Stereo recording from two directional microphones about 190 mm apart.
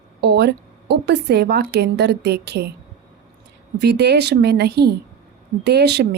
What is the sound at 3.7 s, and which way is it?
A woman's voice, 60° right (ahead or behind).